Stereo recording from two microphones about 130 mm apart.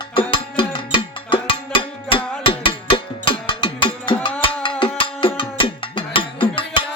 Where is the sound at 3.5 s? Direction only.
40° left (ahead or behind).